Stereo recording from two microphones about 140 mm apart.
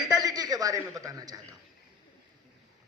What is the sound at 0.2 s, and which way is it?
A man's voice, 25° right (ahead or behind).